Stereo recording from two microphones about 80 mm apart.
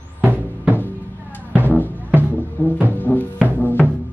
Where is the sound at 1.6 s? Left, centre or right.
Left.